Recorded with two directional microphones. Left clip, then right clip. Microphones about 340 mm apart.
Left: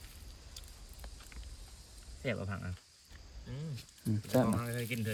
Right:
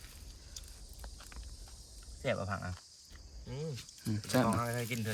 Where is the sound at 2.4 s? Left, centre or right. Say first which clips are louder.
Right 5 dB; centre.